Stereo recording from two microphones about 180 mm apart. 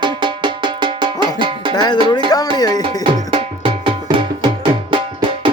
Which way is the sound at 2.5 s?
20° left (ahead or behind).